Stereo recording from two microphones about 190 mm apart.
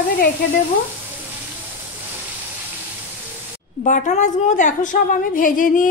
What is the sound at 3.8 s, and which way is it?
A woman's voice, 45° left (ahead or behind).